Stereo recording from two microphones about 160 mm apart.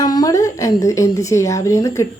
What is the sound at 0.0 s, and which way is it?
Speech, 25° left (ahead or behind).